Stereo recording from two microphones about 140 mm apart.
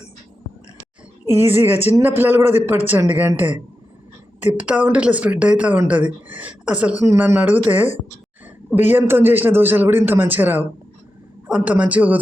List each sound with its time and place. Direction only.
1.2 s a woman's voice: 15° right (ahead or behind)
4.5 s a man's voice: 10° right (ahead or behind)
7.0 s a man's voice: 20° right (ahead or behind)